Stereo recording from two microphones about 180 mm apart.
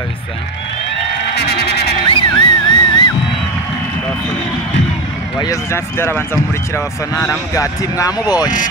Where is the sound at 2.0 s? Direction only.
25° left (ahead or behind).